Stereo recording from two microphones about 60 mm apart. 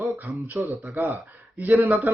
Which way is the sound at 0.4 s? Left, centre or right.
Right.